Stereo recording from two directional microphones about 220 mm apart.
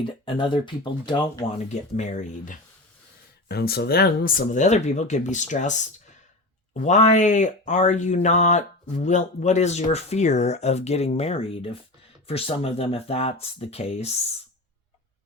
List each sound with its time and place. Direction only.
0.3 s speech: 20° left (ahead or behind)
1.7 s speech: 30° left (ahead or behind)
3.5 s speech: 45° left (ahead or behind); by 14.2 s 30° left (ahead or behind)